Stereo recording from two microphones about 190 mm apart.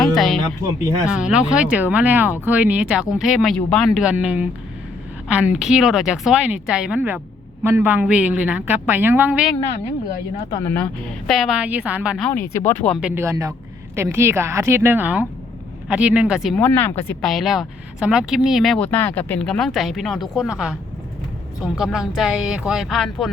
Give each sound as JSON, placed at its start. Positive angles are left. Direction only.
{"t": 0.0, "sound": "music", "side_deg": 0}
{"t": 1.1, "sound": "a woman's voice", "side_deg": -5}
{"t": 10.5, "sound": "speech", "side_deg": 15}
{"t": 11.3, "sound": "speech", "side_deg": 0}
{"t": 13.1, "sound": "a woman's voice", "side_deg": -15}
{"t": 16.6, "sound": "speech", "side_deg": 10}
{"t": 21.9, "sound": "speech", "side_deg": 0}